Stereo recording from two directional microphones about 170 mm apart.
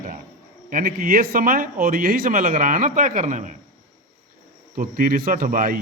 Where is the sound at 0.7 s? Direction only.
60° right (ahead or behind).